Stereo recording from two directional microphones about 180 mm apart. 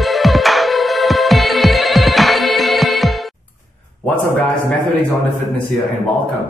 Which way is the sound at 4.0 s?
10° left (ahead or behind).